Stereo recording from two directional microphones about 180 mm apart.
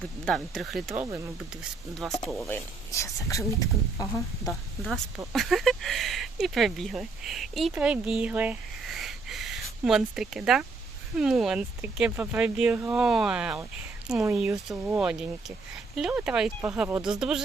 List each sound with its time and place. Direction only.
0.3 s speech: centre (ahead or behind)
0.9 s speech: 15° right (ahead or behind)
2.0 s speech: centre (ahead or behind)
2.5 s speech: 15° left (ahead or behind)
5.3 s speech: centre (ahead or behind)